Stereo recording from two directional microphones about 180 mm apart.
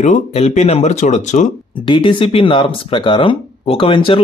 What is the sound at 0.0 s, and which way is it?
Speech, 40° left (ahead or behind).